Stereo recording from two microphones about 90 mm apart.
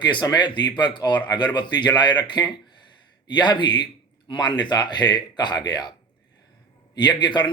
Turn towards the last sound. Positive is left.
turn(degrees=60)  # may be behind; listen again after turning